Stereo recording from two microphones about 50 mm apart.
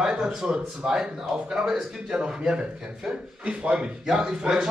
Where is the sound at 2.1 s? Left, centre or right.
Centre.